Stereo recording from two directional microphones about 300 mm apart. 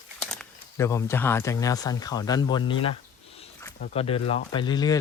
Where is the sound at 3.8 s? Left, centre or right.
Centre.